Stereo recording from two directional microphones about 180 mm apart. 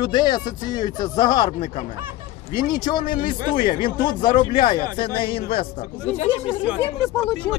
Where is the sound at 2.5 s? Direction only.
25° left (ahead or behind).